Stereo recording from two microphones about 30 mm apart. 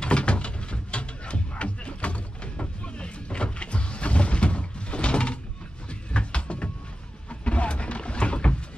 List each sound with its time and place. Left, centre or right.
0.0 s music: left
2.8 s vehicle: left
5.9 s a sound: left